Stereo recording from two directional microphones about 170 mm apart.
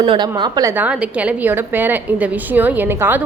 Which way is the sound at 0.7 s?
5° right (ahead or behind).